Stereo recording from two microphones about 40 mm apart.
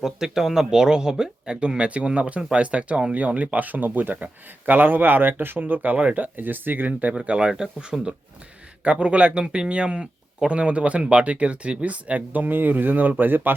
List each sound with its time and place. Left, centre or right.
0.0 s speech: centre; by 5.5 s right
5.5 s speech: right
7.1 s speech: right